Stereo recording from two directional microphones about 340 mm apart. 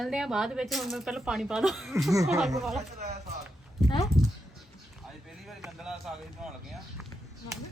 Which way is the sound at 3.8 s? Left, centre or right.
Centre.